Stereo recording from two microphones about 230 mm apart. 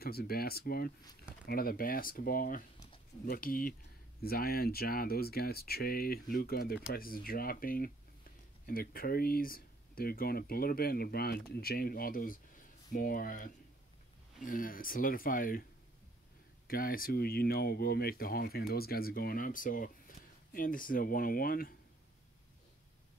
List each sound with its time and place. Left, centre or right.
0.0 s speech: left
16.6 s speech: left